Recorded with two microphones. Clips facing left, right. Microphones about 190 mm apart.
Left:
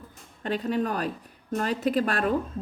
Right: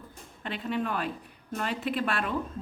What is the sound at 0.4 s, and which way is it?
Speech, 40° left (ahead or behind).